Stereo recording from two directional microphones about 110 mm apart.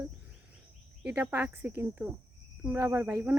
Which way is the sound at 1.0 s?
15° right (ahead or behind).